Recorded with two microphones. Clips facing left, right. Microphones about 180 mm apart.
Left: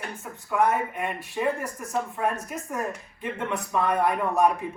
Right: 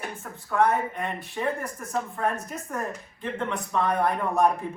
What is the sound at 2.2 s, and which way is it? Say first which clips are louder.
Speech: even; 10° left (ahead or behind).